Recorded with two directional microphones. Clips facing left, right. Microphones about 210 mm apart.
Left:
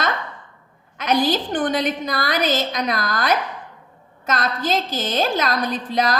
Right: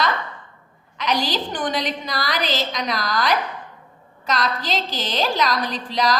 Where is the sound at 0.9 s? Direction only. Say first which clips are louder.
Left 4 dB; 50° left (ahead or behind).